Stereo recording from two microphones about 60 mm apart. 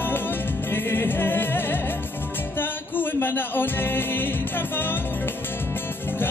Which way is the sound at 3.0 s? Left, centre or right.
Left.